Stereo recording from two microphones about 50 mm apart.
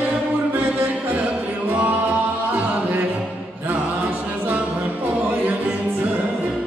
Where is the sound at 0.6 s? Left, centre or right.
Right.